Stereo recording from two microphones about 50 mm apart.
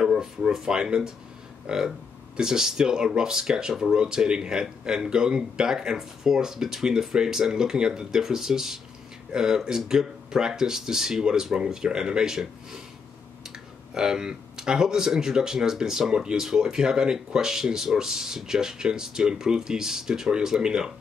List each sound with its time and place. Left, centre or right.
0.0 s speech: centre
13.9 s speech: centre